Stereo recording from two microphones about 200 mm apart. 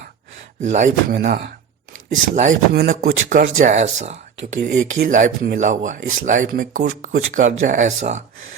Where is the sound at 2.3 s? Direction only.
40° right (ahead or behind).